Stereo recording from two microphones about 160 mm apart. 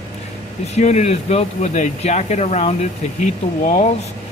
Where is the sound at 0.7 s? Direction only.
45° left (ahead or behind).